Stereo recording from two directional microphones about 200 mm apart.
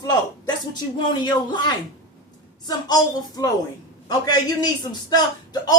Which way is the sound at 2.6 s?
20° left (ahead or behind).